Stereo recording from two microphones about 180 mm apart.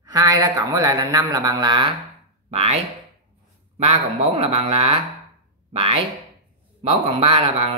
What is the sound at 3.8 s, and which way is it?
Speech, 35° right (ahead or behind).